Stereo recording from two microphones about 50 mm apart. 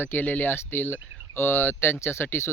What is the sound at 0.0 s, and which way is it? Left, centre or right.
Speech, left.